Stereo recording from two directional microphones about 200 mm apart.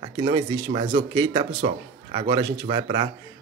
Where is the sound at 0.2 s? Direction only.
20° right (ahead or behind).